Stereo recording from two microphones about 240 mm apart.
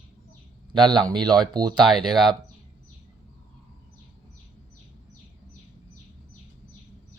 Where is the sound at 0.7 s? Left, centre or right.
Centre.